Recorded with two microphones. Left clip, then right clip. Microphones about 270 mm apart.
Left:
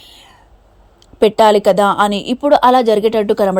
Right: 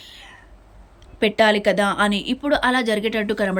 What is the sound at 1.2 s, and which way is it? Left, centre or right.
A woman's voice, centre.